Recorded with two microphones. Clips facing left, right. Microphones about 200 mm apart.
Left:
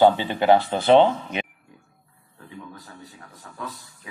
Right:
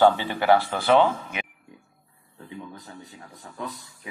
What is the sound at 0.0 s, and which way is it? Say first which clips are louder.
Speech: left 2 dB; 20° left (ahead or behind).